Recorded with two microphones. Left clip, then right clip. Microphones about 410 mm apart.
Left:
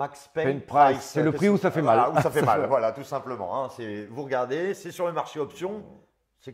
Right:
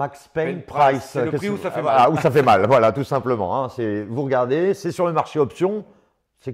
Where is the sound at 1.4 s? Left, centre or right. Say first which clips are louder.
Left 3 dB; left.